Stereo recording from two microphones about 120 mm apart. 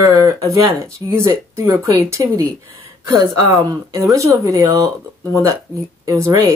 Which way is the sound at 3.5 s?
30° right (ahead or behind).